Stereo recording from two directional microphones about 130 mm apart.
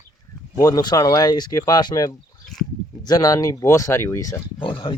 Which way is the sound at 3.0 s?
30° left (ahead or behind).